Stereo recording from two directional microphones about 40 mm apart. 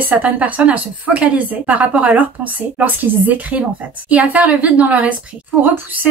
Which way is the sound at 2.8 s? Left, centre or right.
Right.